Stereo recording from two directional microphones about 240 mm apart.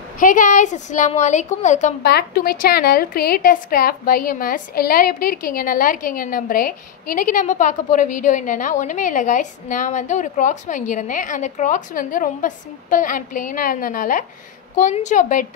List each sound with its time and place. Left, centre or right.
0.2 s a woman's voice: left
2.0 s a woman's voice: left